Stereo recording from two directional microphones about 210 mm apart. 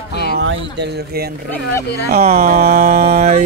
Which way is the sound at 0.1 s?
50° left (ahead or behind).